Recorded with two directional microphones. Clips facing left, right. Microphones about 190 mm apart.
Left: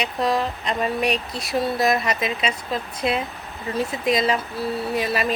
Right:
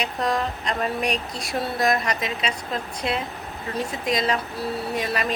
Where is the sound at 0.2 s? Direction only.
5° left (ahead or behind).